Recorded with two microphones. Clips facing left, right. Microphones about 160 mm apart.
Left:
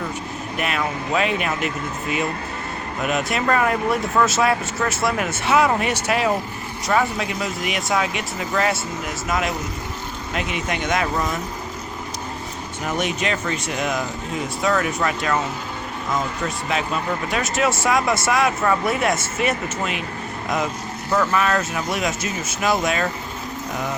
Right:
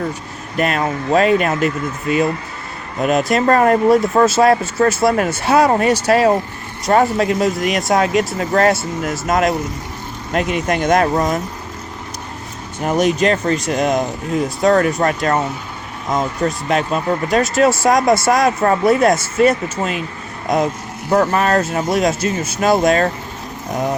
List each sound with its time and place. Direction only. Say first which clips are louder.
0.6 s speech: right 7 dB; 40° right (ahead or behind)
3.0 s speech: right 8 dB; 35° right (ahead or behind)
12.8 s speech: right 9 dB; 40° right (ahead or behind)
21.1 s speech: right 5 dB; 35° right (ahead or behind)